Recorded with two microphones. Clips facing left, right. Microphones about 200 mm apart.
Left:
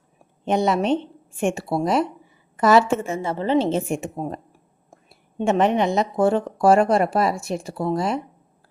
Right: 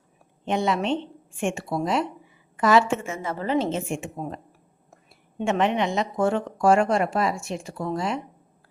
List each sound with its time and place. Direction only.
0.4 s speech: 40° left (ahead or behind)
5.4 s speech: 40° left (ahead or behind)